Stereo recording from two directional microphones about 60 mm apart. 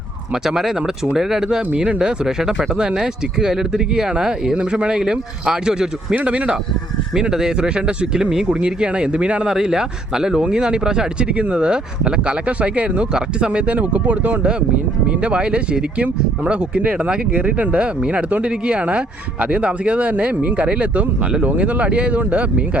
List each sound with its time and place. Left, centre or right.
0.4 s speech: centre
6.1 s speech: right
7.1 s speech: centre